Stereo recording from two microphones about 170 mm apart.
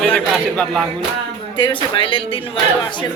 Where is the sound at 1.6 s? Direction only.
30° left (ahead or behind).